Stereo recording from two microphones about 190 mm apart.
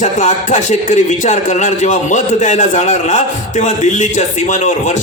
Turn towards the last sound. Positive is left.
turn(degrees=40)  # may be behind; listen again after turning